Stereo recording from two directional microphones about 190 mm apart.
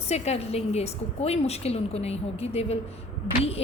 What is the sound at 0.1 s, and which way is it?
A woman's voice, 35° left (ahead or behind).